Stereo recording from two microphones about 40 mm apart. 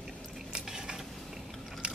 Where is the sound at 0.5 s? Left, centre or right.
Centre.